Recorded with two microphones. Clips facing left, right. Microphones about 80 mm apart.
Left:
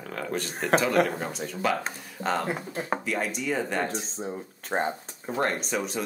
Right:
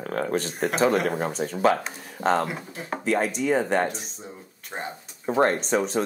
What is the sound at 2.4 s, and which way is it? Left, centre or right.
Speech, left.